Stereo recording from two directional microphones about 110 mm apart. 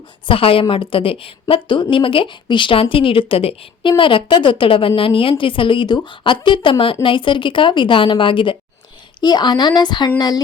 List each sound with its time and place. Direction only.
0.3 s a woman's voice: 55° left (ahead or behind); by 10.4 s 40° left (ahead or behind)